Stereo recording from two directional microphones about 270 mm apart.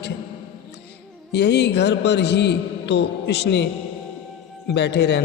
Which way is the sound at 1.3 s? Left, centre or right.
Left.